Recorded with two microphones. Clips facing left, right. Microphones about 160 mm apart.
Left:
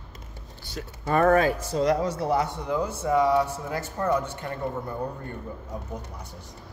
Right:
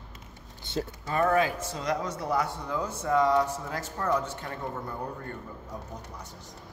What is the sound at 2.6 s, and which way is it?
A man's voice, 10° left (ahead or behind).